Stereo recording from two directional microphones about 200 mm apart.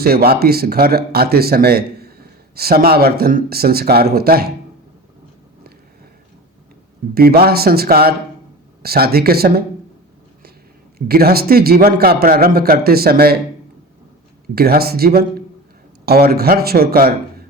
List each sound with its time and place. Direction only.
0.0 s speech: 50° right (ahead or behind)
7.1 s speech: 50° right (ahead or behind)
10.9 s speech: 50° right (ahead or behind)
14.5 s speech: 50° right (ahead or behind)